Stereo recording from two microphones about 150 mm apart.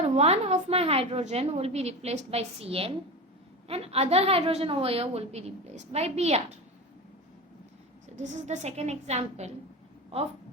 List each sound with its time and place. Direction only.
0.0 s a woman's voice: 45° right (ahead or behind)
8.2 s a woman's voice: 50° right (ahead or behind)